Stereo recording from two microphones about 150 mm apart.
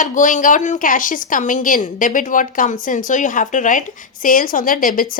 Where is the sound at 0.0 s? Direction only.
60° left (ahead or behind).